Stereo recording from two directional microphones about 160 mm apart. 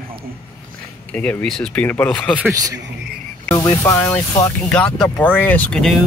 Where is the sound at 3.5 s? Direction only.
20° left (ahead or behind).